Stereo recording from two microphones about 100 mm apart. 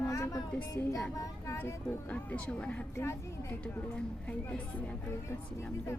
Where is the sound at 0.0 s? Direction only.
30° left (ahead or behind).